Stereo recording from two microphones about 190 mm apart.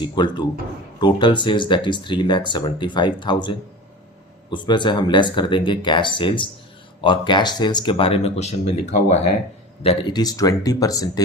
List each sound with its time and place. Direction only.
0.0 s speech: 25° left (ahead or behind)
4.5 s speech: 25° left (ahead or behind)